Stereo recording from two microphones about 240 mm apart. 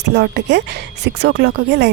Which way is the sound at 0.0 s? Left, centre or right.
Right.